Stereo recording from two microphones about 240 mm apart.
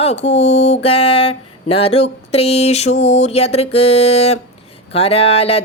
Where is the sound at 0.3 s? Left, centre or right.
Left.